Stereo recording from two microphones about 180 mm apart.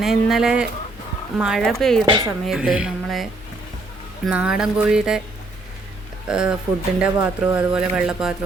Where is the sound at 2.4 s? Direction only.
5° right (ahead or behind).